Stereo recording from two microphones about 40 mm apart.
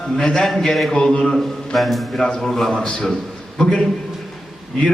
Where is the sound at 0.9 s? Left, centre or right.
Left.